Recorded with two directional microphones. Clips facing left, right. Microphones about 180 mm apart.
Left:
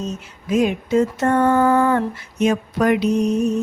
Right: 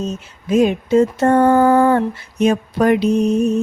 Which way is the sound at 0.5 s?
30° right (ahead or behind).